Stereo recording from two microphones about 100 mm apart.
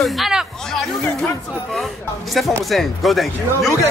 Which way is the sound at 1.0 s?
15° left (ahead or behind).